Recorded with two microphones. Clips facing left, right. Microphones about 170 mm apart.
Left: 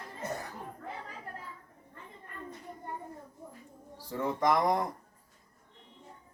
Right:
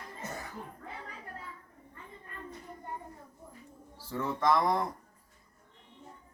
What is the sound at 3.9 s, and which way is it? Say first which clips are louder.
Speech: left 2 dB; 15° left (ahead or behind).